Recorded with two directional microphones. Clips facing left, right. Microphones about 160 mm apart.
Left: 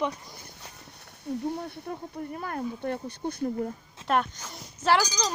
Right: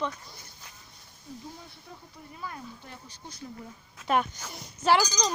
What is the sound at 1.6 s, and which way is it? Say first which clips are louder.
Speech: left 13 dB; 60° left (ahead or behind).